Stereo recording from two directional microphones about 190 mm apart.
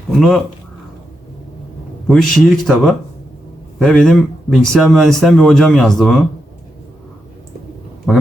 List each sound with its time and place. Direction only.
2.0 s speech: centre (ahead or behind)
8.1 s speech: centre (ahead or behind)